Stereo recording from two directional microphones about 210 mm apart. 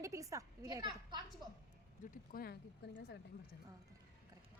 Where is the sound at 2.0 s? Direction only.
45° left (ahead or behind).